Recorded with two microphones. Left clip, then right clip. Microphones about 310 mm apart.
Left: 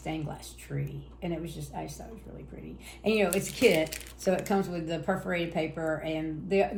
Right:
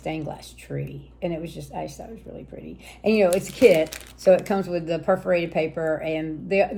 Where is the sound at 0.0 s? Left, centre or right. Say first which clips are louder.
Right 6 dB; right.